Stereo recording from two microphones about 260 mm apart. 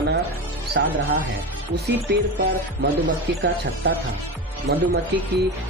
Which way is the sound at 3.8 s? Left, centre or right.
Right.